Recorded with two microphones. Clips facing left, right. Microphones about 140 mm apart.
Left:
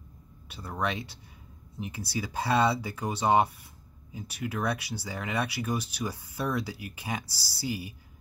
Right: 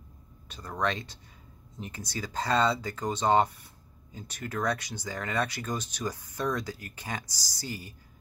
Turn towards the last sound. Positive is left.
turn(degrees=10)  # may be behind; listen again after turning